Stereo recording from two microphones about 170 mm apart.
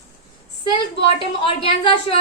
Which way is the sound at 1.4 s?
35° left (ahead or behind).